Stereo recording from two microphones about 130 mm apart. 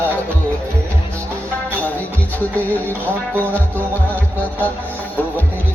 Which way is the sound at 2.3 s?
15° left (ahead or behind).